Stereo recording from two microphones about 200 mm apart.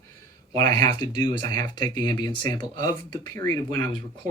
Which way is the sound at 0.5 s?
20° left (ahead or behind).